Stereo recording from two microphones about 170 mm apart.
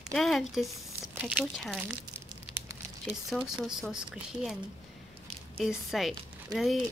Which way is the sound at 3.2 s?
Centre (ahead or behind).